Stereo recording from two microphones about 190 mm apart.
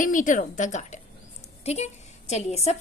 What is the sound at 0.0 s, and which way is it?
A woman's voice, 45° left (ahead or behind).